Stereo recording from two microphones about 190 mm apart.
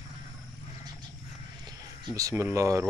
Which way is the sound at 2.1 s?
15° right (ahead or behind).